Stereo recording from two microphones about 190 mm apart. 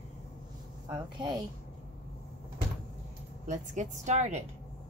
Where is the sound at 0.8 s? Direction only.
20° right (ahead or behind).